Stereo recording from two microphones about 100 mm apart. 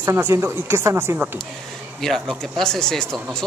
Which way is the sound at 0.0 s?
30° right (ahead or behind).